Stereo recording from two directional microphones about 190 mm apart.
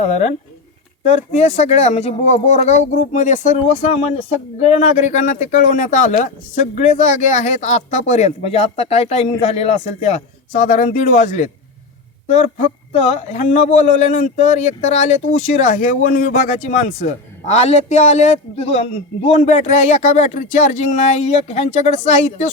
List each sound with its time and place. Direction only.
0.0 s a man's voice: 35° left (ahead or behind)